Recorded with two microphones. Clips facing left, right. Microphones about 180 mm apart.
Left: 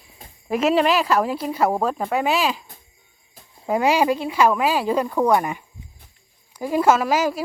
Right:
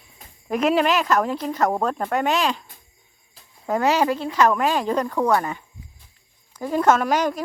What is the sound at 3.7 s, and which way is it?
Speech, 10° left (ahead or behind).